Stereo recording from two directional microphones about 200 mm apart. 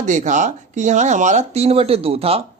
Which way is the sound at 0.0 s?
40° right (ahead or behind).